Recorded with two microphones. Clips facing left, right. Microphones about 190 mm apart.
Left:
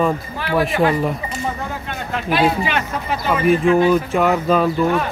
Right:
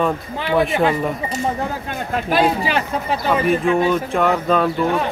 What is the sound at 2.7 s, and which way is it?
Speech, 35° right (ahead or behind).